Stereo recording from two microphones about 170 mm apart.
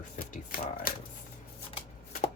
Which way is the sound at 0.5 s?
60° left (ahead or behind).